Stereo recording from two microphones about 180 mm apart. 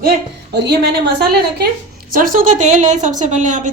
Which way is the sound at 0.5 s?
70° right (ahead or behind).